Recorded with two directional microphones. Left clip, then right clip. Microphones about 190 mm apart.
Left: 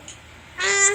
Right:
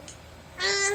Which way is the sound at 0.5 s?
20° left (ahead or behind).